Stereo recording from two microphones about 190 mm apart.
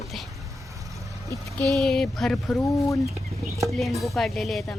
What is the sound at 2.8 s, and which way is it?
Speech, 15° left (ahead or behind).